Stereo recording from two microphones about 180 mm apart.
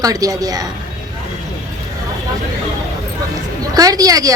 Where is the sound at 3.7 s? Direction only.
20° right (ahead or behind).